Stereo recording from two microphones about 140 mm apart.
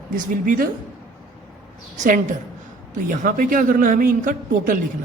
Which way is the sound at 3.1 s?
70° right (ahead or behind).